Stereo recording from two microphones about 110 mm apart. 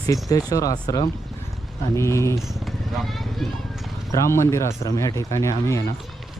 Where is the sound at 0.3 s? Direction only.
30° left (ahead or behind).